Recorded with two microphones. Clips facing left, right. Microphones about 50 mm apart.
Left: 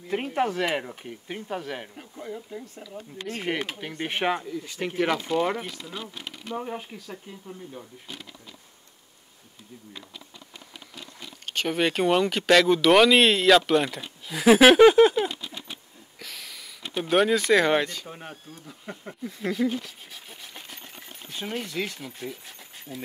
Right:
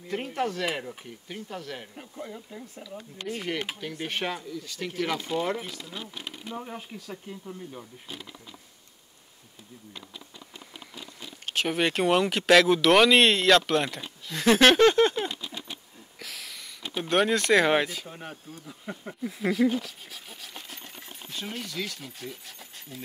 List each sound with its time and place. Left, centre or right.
0.1 s speech: left
2.0 s speech: centre
3.3 s speech: left
5.4 s speech: centre
11.4 s speech: centre
14.2 s a sound: centre
18.0 s speech: centre; by 22.0 s left
22.3 s speech: centre